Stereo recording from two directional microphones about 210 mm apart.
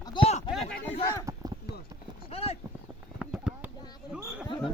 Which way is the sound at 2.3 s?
30° left (ahead or behind).